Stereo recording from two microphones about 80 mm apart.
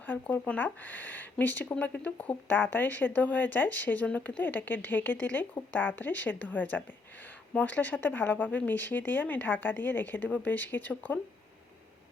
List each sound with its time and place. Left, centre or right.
0.0 s speech: left